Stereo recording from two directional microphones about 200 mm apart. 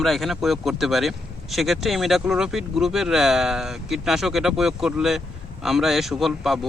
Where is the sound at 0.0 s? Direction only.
Centre (ahead or behind).